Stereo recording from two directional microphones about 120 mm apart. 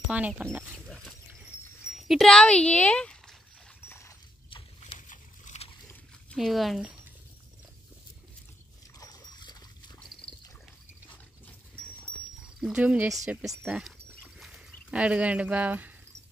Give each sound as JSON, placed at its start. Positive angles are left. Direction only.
{"t": 0.4, "sound": "speech", "side_deg": -15}
{"t": 0.7, "sound": "wild animals", "side_deg": 5}
{"t": 1.9, "sound": "speech", "side_deg": 0}
{"t": 4.5, "sound": "a sound", "side_deg": 45}
{"t": 4.9, "sound": "boat", "side_deg": 90}
{"t": 6.3, "sound": "speech", "side_deg": 0}
{"t": 9.0, "sound": "dog", "side_deg": 35}
{"t": 12.5, "sound": "speech", "side_deg": -5}